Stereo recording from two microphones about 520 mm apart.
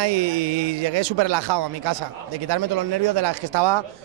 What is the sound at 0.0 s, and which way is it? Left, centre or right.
Speech, right.